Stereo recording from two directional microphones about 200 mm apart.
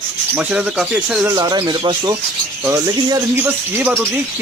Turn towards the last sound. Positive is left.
turn(degrees=-15)  # may be behind; listen again after turning